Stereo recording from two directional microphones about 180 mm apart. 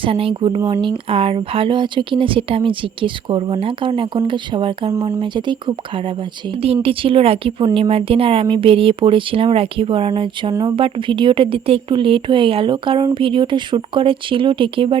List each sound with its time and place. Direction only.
0.0 s speech: 30° right (ahead or behind)
6.8 s speech: 30° right (ahead or behind)